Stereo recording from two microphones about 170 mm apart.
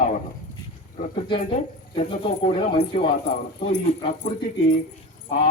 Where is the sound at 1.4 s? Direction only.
40° left (ahead or behind).